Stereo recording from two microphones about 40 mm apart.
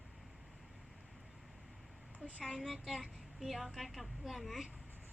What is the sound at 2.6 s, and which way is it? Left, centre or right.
Speech, centre.